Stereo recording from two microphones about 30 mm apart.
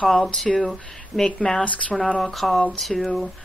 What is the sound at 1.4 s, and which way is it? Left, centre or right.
Speech, left.